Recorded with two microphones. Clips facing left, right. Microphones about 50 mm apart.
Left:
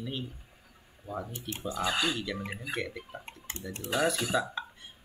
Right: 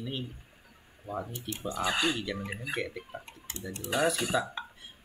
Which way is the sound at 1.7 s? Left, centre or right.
Centre.